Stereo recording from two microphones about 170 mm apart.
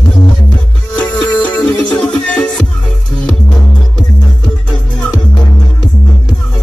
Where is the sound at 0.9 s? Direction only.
5° left (ahead or behind).